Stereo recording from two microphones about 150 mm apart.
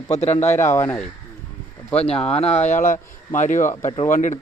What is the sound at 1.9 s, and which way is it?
Speech, 40° left (ahead or behind).